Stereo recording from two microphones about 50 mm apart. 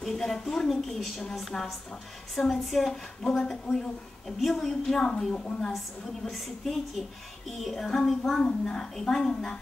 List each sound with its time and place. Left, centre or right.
0.0 s a woman's voice: centre
6.3 s a woman's voice: centre